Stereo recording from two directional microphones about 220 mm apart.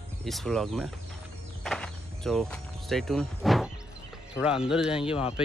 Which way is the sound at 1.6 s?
Centre (ahead or behind).